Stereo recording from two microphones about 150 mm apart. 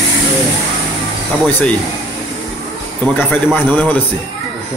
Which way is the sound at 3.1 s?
10° left (ahead or behind).